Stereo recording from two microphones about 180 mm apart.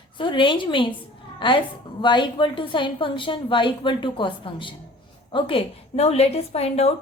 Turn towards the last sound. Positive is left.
turn(degrees=35)  # may be behind; listen again after turning